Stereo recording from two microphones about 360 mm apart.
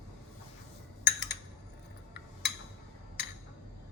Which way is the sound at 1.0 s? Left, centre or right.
Left.